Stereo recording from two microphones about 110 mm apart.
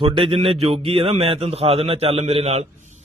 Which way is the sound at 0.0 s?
55° right (ahead or behind).